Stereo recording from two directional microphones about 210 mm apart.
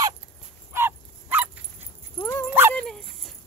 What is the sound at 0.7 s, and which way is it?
Dog, 10° right (ahead or behind).